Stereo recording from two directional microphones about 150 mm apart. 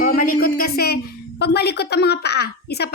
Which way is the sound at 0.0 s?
70° left (ahead or behind).